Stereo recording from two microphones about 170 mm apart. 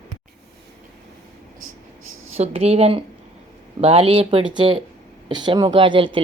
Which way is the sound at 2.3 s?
35° right (ahead or behind).